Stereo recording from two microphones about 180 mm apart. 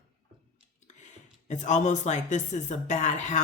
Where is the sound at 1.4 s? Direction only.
40° left (ahead or behind).